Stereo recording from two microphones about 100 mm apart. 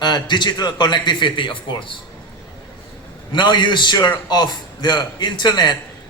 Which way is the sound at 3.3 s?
50° left (ahead or behind).